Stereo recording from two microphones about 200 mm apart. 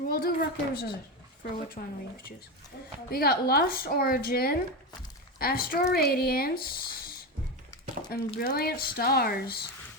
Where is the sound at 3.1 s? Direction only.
50° left (ahead or behind).